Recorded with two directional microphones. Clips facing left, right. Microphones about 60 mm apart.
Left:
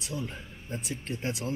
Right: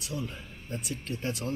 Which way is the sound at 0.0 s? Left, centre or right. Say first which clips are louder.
Even; left.